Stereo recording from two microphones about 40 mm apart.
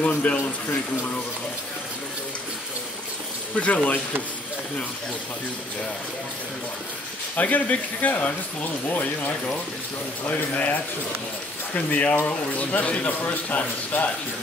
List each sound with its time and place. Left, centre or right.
0.0 s a man's voice: left
3.5 s a man's voice: left
7.3 s a man's voice: left